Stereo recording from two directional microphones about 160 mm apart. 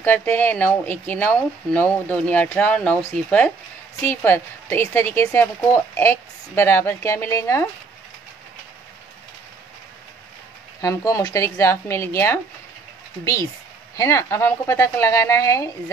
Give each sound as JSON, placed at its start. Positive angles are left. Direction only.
{"t": 0.0, "sound": "a woman's voice", "side_deg": 10}
{"t": 10.8, "sound": "a woman's voice", "side_deg": 20}